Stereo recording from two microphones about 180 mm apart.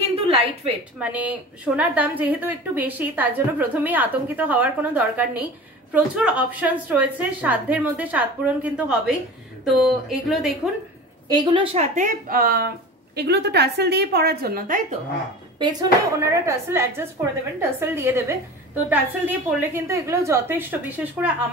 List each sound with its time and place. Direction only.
0.0 s a sound: 35° right (ahead or behind)
0.9 s a woman's voice: 10° right (ahead or behind)
11.2 s speech: 25° right (ahead or behind); by 15.0 s 50° right (ahead or behind)
15.6 s a woman's voice: 20° right (ahead or behind)